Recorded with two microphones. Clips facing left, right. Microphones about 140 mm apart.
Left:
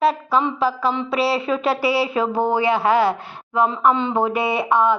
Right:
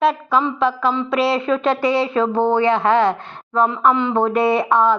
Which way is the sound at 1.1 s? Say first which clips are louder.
Right 3 dB; 5° left (ahead or behind).